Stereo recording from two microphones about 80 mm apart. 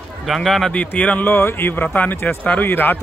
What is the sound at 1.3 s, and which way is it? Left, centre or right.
Speech, left.